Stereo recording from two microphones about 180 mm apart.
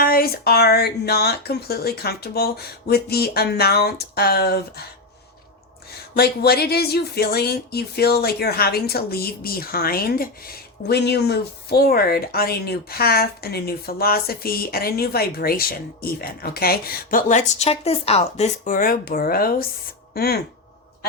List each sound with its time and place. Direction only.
0.0 s speech: 55° left (ahead or behind)
6.1 s speech: 60° left (ahead or behind)